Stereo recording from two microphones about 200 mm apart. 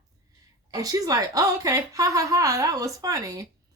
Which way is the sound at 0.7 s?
20° right (ahead or behind).